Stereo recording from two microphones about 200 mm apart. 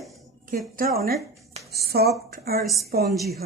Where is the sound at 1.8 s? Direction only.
50° right (ahead or behind).